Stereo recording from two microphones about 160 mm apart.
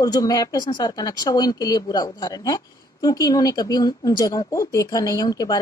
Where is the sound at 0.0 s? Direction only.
25° left (ahead or behind).